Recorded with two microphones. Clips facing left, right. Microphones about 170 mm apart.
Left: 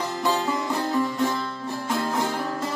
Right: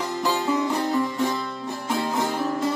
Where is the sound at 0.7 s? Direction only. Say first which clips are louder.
Right 2 dB; 20° right (ahead or behind).